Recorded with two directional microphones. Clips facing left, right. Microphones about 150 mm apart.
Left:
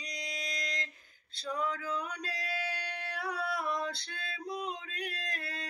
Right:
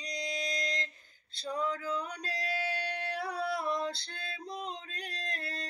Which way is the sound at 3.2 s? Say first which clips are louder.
Even; 30° right (ahead or behind).